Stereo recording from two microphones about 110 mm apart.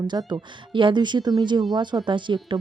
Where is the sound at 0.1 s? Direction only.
40° right (ahead or behind).